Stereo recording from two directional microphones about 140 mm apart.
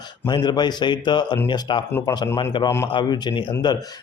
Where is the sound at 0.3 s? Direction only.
30° left (ahead or behind).